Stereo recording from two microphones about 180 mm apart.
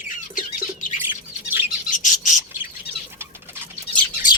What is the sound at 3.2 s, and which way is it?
Bird, 10° right (ahead or behind).